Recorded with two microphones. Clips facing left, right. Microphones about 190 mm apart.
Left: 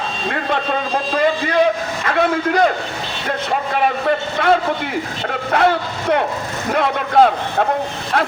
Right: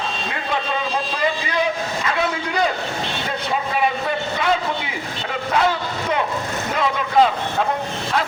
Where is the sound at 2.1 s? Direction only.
55° left (ahead or behind).